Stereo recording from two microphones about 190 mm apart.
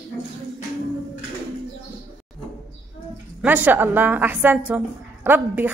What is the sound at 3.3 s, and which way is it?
A woman's voice, 10° right (ahead or behind).